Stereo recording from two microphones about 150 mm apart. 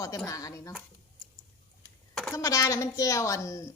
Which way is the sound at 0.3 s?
20° left (ahead or behind).